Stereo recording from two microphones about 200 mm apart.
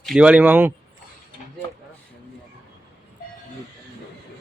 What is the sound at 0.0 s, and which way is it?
Speech, 5° right (ahead or behind).